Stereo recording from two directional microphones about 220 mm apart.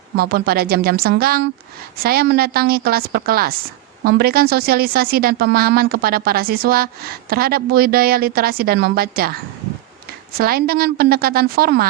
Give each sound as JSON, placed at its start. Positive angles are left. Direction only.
{"t": 0.2, "sound": "speech", "side_deg": -45}
{"t": 10.3, "sound": "speech", "side_deg": -45}